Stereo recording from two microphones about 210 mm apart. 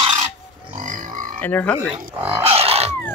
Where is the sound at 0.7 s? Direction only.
35° right (ahead or behind).